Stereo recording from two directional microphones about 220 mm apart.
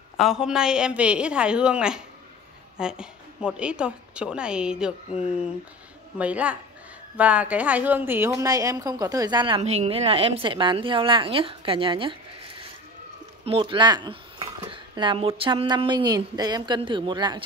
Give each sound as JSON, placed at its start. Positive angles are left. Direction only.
{"t": 0.2, "sound": "a woman's voice", "side_deg": 0}
{"t": 13.5, "sound": "a woman's voice", "side_deg": -25}